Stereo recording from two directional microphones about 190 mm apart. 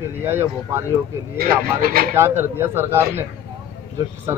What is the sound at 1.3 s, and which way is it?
Speech, 50° right (ahead or behind).